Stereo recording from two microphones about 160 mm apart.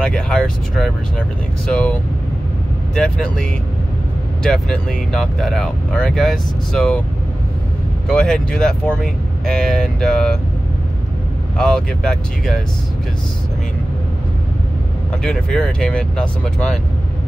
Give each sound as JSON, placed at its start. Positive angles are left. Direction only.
{"t": 0.0, "sound": "speech", "side_deg": 5}
{"t": 8.1, "sound": "speech", "side_deg": 5}
{"t": 11.5, "sound": "speech", "side_deg": 5}
{"t": 15.2, "sound": "speech", "side_deg": 5}